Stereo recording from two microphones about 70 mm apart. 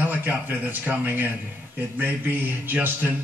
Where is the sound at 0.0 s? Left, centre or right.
Right.